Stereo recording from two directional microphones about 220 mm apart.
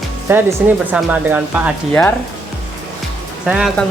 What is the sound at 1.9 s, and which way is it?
Speech, 5° left (ahead or behind).